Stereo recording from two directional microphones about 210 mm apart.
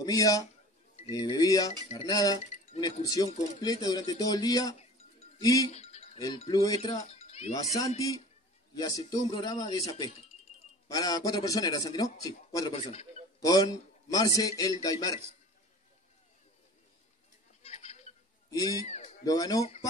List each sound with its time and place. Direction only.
0.0 s speech: 15° left (ahead or behind)
5.7 s chink: 30° left (ahead or behind)
6.1 s speech: 20° left (ahead or behind)
6.8 s speech: 30° left (ahead or behind)
8.7 s a man's voice: 20° left (ahead or behind)
17.6 s goat: 30° left (ahead or behind)
18.5 s speech: 20° left (ahead or behind)
18.9 s a sound: 35° left (ahead or behind)
19.2 s speech: 15° left (ahead or behind)